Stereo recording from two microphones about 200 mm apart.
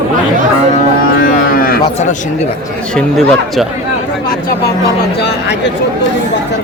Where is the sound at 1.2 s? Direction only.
45° left (ahead or behind).